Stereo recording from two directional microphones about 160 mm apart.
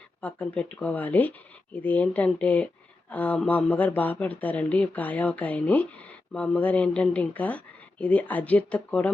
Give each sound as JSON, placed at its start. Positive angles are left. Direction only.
{"t": 0.2, "sound": "speech", "side_deg": 10}